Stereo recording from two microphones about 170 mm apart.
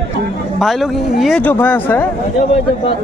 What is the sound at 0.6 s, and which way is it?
Speech, centre (ahead or behind).